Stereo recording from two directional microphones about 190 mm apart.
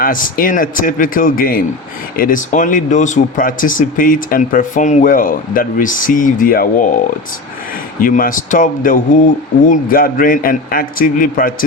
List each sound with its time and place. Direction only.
0.0 s speech: 45° left (ahead or behind)
8.0 s speech: 45° left (ahead or behind)